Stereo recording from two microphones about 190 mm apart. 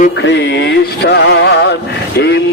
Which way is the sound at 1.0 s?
65° left (ahead or behind).